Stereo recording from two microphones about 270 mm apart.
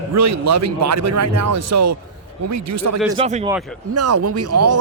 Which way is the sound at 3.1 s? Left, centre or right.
Right.